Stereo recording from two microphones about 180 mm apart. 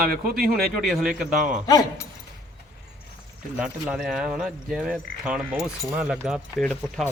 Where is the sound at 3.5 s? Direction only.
5° right (ahead or behind).